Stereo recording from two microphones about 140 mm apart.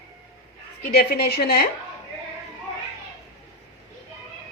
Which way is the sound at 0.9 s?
90° left.